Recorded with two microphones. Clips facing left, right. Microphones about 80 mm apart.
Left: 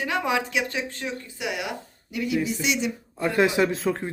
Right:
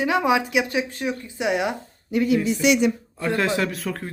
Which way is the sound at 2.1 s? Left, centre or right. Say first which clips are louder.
Right 6 dB; right.